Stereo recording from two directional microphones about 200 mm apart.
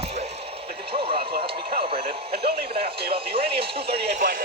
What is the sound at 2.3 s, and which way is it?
Radio, 50° right (ahead or behind).